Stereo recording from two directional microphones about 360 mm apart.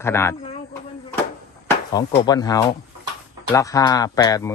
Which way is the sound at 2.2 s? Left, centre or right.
Centre.